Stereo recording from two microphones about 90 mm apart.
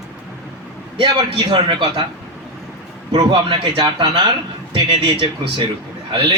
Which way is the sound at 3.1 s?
65° right (ahead or behind).